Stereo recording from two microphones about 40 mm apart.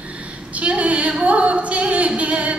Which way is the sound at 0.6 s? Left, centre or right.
Right.